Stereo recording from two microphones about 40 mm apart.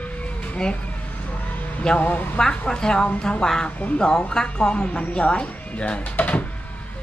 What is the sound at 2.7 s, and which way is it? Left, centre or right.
Speech, centre.